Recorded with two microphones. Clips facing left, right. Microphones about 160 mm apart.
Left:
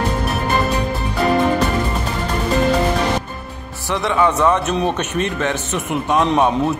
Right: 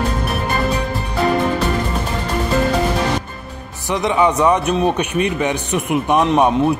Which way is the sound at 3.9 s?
15° right (ahead or behind).